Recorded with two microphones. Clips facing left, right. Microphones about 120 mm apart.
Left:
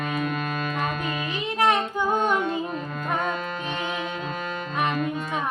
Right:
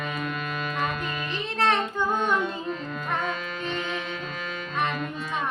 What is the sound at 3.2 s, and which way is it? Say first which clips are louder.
Music: left 2 dB; 45° left (ahead or behind).